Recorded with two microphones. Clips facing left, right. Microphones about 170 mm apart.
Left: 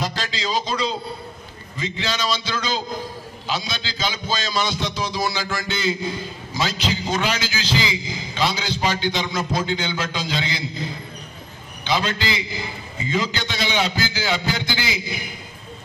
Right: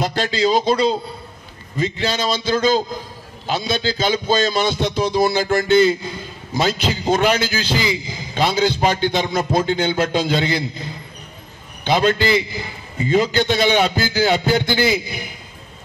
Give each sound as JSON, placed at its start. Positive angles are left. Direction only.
{"t": 0.0, "sound": "a man's voice", "side_deg": -55}
{"t": 11.8, "sound": "a man's voice", "side_deg": -50}